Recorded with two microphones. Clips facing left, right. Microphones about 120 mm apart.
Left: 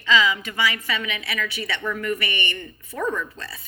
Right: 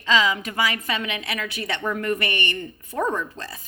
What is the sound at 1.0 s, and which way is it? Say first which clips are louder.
Speech: even; 50° right (ahead or behind).